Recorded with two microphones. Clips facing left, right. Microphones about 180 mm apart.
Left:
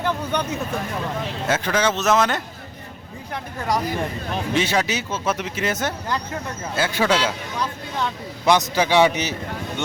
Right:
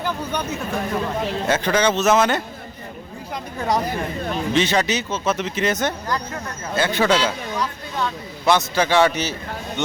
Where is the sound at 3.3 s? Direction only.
20° right (ahead or behind).